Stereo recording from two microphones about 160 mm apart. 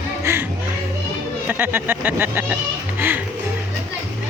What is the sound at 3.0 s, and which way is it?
Music, 15° right (ahead or behind).